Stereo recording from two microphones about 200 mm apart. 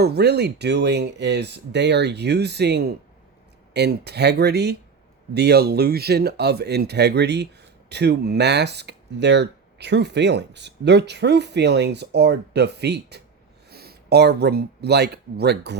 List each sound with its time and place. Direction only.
0.0 s speech: 55° right (ahead or behind)